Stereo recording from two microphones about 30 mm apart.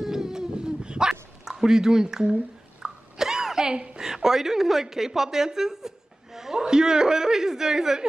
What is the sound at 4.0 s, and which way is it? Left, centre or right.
A woman's voice, centre.